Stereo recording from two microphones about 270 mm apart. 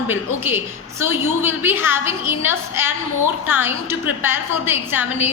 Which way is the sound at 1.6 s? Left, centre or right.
Centre.